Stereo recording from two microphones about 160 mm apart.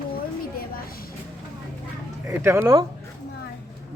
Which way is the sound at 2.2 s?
15° right (ahead or behind).